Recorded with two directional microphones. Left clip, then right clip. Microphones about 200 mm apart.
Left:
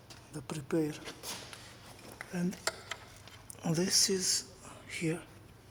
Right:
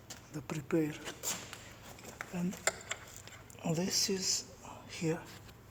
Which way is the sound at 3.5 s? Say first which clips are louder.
Left 4 dB; 30° left (ahead or behind).